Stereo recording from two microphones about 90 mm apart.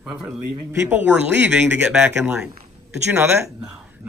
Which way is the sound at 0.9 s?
15° right (ahead or behind).